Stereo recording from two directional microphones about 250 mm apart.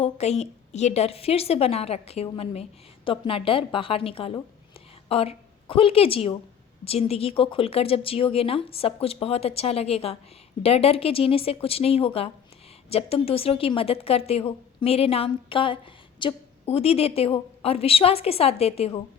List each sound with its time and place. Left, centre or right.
0.0 s a woman's voice: left